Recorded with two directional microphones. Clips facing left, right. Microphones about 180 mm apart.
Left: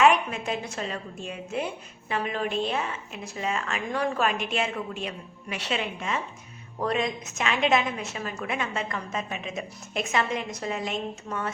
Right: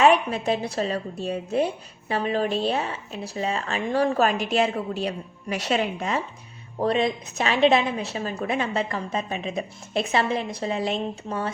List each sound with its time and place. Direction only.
0.0 s a woman's voice: 35° right (ahead or behind)